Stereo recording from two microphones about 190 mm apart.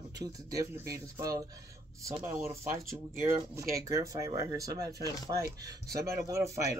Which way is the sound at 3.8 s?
15° right (ahead or behind).